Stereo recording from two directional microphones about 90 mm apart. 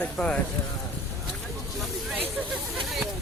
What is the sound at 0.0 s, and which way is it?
Speech, 15° left (ahead or behind).